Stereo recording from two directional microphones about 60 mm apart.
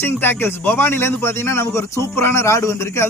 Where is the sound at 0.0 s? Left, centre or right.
Left.